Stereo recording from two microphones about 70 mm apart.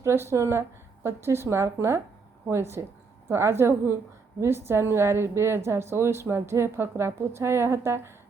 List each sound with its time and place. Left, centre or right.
0.0 s a woman's voice: right